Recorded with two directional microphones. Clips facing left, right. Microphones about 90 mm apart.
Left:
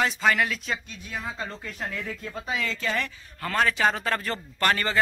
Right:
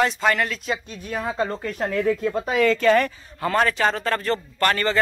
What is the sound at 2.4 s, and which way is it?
Speech, 55° right (ahead or behind).